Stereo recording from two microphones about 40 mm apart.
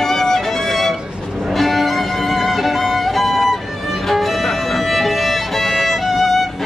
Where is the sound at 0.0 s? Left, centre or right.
Centre.